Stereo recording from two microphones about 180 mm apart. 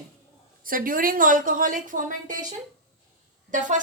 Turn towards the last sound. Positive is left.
turn(degrees=-45)  # may be behind; listen again after turning